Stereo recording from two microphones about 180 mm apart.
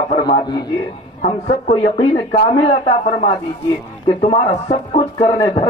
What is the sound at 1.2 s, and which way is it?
A man's voice, 35° left (ahead or behind).